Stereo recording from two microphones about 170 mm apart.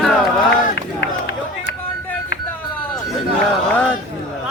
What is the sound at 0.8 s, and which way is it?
Run, 80° left.